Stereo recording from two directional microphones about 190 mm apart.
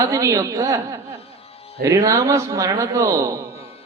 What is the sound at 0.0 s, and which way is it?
A man's voice, 15° right (ahead or behind).